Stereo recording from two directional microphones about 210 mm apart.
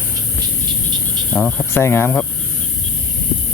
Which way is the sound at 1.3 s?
5° left (ahead or behind).